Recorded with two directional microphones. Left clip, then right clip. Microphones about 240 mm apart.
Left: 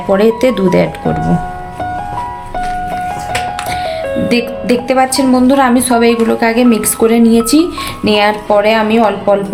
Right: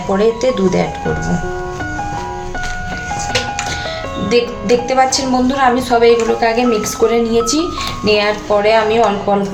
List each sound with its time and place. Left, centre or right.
0.1 s a woman's voice: left
4.3 s a woman's voice: left